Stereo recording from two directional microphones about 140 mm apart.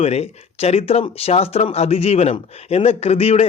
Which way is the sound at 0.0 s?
45° left (ahead or behind).